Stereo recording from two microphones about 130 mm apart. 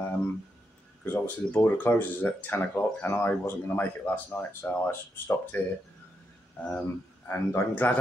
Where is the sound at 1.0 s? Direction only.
15° left (ahead or behind).